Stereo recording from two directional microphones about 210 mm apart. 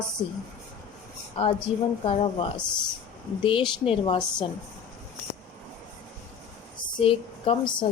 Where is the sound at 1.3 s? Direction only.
25° left (ahead or behind).